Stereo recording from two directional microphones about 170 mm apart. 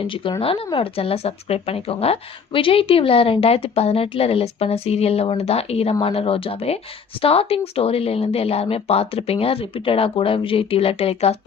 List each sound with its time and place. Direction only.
0.0 s speech: 30° left (ahead or behind)